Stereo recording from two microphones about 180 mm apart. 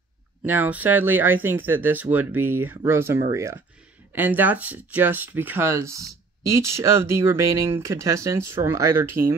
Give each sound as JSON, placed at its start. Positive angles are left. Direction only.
{"t": 0.5, "sound": "speech", "side_deg": -10}